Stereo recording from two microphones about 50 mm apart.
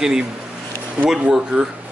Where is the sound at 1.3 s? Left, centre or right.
Centre.